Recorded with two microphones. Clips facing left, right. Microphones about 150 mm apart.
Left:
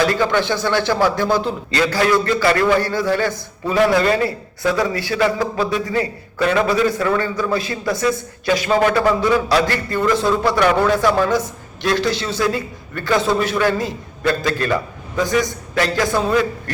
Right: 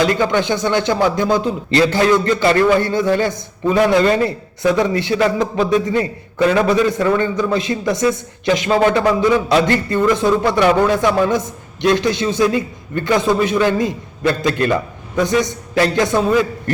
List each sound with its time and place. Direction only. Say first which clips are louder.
0.0 s a man's voice: right 1 dB; 20° right (ahead or behind)